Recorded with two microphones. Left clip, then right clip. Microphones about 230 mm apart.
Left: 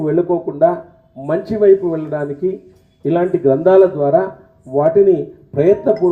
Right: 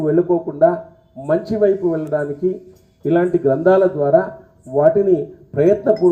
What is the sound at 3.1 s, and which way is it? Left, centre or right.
Speech, left.